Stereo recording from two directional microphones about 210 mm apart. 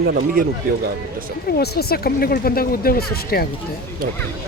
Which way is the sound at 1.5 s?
50° left (ahead or behind).